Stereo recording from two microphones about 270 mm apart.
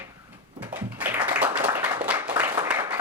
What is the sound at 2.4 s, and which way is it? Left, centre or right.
Applause, centre.